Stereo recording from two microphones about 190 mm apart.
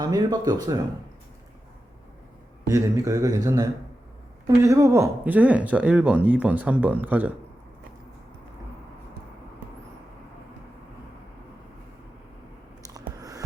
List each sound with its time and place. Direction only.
0.0 s speech: 20° right (ahead or behind)
2.6 s speech: 15° right (ahead or behind)
12.9 s a sound: 20° right (ahead or behind)